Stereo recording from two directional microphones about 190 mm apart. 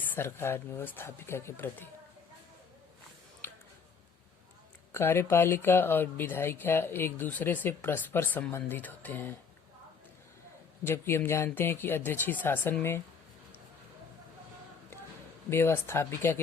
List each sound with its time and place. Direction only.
0.1 s speech: 15° left (ahead or behind)
4.9 s speech: 15° left (ahead or behind)
10.8 s speech: 15° left (ahead or behind)
15.4 s speech: 10° left (ahead or behind)